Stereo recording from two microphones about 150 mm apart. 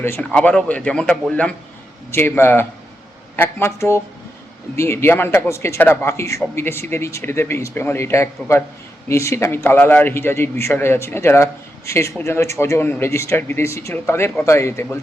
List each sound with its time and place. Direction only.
0.0 s a man's voice: 15° left (ahead or behind)